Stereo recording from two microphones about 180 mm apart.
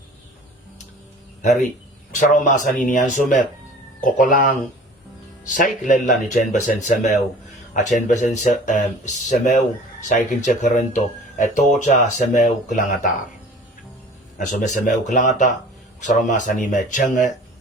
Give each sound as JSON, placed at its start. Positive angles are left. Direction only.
{"t": 1.4, "sound": "speech", "side_deg": 40}
{"t": 14.3, "sound": "speech", "side_deg": 45}